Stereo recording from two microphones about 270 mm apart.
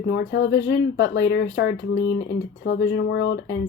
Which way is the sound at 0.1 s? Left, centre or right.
Left.